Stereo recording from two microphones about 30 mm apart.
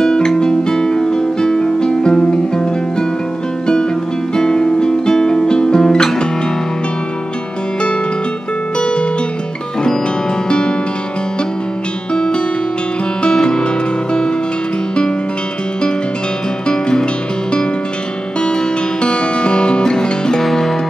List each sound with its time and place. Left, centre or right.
0.0 s music: left
4.4 s music: left
8.7 s music: left
10.5 s music: left
12.1 s music: left
16.6 s music: left
18.4 s guitar: left
20.3 s music: centre